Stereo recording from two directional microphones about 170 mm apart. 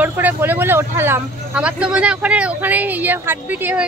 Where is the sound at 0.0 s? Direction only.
10° right (ahead or behind).